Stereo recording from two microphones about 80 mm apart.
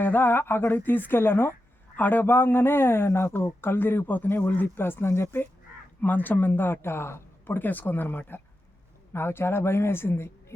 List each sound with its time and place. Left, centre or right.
0.0 s a man's voice: left